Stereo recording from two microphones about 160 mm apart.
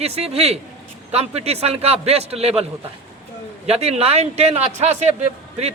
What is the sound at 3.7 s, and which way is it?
A man's voice, 40° right (ahead or behind).